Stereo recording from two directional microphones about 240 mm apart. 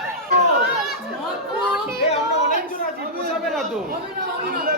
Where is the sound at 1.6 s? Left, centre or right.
Centre.